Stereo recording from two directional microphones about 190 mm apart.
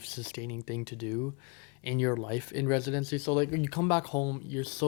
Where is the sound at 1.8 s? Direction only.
15° left (ahead or behind).